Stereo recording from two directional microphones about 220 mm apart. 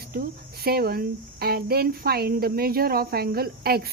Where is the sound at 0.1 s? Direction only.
45° right (ahead or behind).